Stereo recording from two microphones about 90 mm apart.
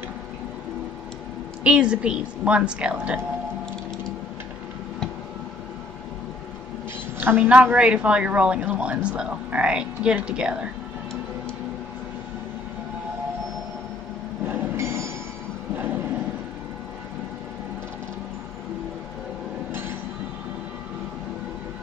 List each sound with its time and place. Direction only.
1.6 s a woman's voice: 10° right (ahead or behind)
7.2 s a woman's voice: 20° right (ahead or behind)
14.5 s train: 25° right (ahead or behind)